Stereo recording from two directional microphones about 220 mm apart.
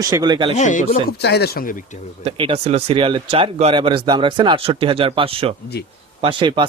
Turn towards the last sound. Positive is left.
turn(degrees=-20)  # may be behind; listen again after turning